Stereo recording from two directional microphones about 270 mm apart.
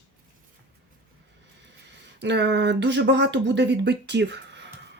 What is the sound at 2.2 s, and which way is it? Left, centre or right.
Speech, right.